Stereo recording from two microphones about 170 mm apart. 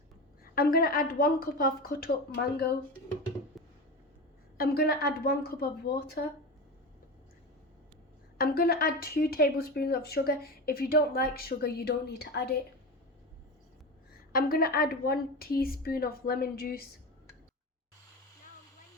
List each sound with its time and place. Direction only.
0.4 s a woman's voice: 60° left (ahead or behind)
3.6 s a sound: centre (ahead or behind)
4.5 s a woman's voice: 65° left (ahead or behind)
8.4 s a woman's voice: 60° left (ahead or behind)
14.1 s a woman's voice: 60° left (ahead or behind)